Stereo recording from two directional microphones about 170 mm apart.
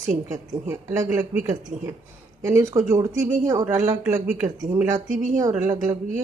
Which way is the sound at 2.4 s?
15° right (ahead or behind).